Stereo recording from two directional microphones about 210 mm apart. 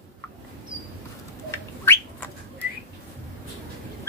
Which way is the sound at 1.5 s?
10° left (ahead or behind).